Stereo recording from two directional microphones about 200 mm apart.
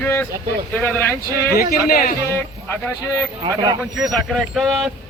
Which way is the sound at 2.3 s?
10° left (ahead or behind).